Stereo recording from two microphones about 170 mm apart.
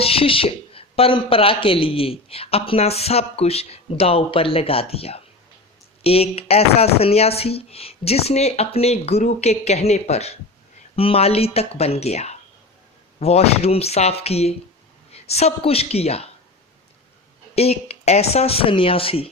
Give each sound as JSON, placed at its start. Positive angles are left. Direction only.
{"t": 0.0, "sound": "a woman's voice", "side_deg": 35}
{"t": 17.5, "sound": "speech", "side_deg": 35}